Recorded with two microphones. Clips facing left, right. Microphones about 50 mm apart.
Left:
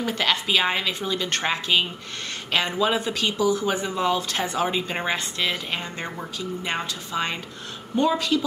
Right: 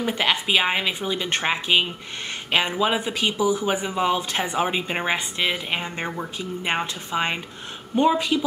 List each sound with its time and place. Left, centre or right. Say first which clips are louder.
0.0 s speech: right 1 dB; centre